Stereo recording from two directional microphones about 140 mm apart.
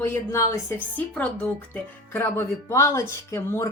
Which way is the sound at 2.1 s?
15° left (ahead or behind).